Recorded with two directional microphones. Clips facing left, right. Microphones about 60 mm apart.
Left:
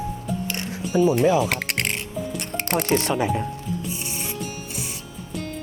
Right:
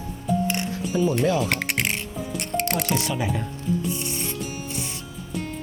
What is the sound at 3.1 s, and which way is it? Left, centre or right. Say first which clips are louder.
Speech: left 4 dB; centre.